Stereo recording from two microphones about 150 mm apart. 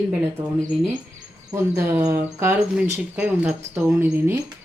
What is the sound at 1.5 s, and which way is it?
Speech, 15° right (ahead or behind).